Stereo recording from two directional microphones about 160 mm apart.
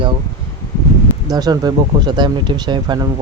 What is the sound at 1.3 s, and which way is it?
Speech, 25° right (ahead or behind).